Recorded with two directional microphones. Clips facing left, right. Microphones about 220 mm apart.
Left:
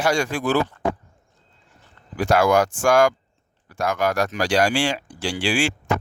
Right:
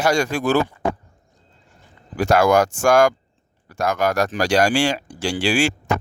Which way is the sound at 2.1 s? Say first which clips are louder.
Right 2 dB; 45° right (ahead or behind).